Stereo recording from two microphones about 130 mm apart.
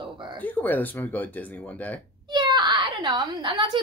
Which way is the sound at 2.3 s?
35° right (ahead or behind).